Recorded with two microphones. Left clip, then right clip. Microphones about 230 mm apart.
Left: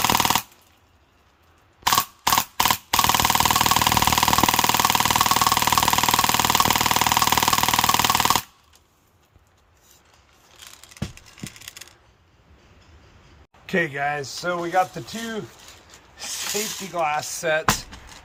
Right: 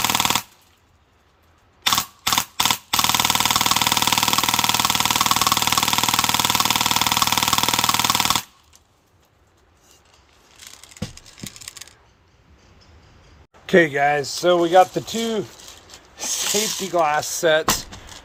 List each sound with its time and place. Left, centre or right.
0.0 s a sound: centre
1.8 s camera: centre
13.7 s speech: right